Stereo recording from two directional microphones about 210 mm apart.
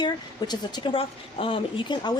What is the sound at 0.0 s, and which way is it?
Speech, 20° left (ahead or behind).